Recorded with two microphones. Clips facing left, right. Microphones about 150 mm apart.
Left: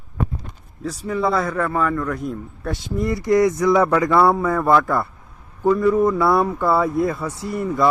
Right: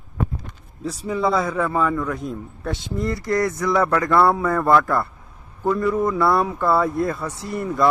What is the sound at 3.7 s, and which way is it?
Speech, 5° left (ahead or behind).